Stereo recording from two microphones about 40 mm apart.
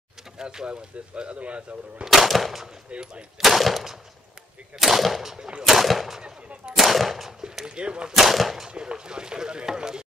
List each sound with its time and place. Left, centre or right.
0.4 s speech: centre
1.1 s speech: right
2.0 s speech: centre
3.0 s speech: right
3.3 s speech: centre
6.2 s speech: right
6.8 s speech: centre
7.4 s speech: centre
8.1 s speech: centre
8.6 s speech: right